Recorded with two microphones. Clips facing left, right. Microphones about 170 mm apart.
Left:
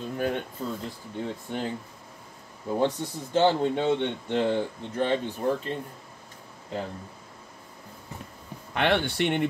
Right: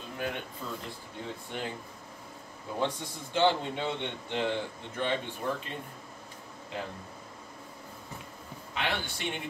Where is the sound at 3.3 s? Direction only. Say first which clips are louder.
Left 5 dB; 45° left (ahead or behind).